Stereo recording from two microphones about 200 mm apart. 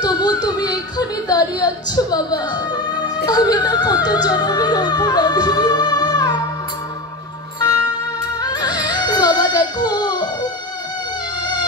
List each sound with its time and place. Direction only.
0.0 s speech: 20° left (ahead or behind)
3.3 s music: 20° left (ahead or behind)
8.4 s music: 20° left (ahead or behind)